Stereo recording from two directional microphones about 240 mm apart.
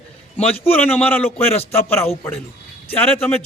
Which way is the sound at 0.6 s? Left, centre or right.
Centre.